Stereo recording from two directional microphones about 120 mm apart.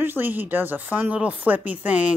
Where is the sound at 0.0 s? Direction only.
15° right (ahead or behind).